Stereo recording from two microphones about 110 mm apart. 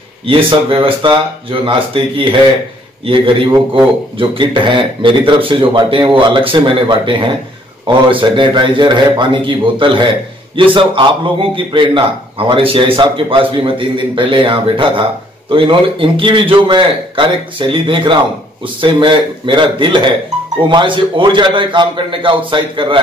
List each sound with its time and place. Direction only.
0.3 s speech: 55° right (ahead or behind)